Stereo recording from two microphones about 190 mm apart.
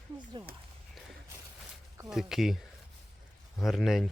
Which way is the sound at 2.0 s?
Centre (ahead or behind).